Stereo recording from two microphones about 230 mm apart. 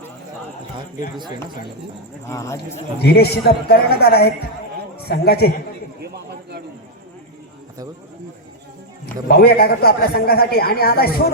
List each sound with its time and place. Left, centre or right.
2.2 s speech: centre
3.0 s a man's voice: left
9.2 s a man's voice: left